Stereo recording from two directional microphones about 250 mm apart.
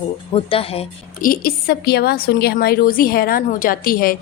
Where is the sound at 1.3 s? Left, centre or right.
Left.